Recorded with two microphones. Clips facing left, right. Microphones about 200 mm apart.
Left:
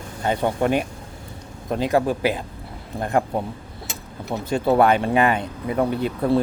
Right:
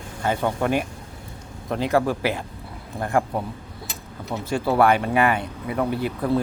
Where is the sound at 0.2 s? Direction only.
20° left (ahead or behind).